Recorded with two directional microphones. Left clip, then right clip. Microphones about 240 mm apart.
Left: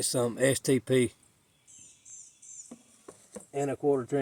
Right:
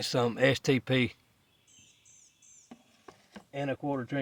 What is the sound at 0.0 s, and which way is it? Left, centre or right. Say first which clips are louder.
Speech: right 1 dB; right.